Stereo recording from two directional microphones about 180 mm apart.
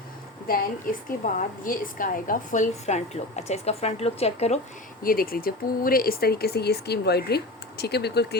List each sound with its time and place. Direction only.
0.4 s a woman's voice: 50° left (ahead or behind); by 4.6 s 35° left (ahead or behind)
5.0 s speech: 55° left (ahead or behind)